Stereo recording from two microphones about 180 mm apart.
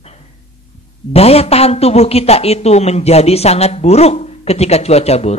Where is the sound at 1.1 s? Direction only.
35° left (ahead or behind).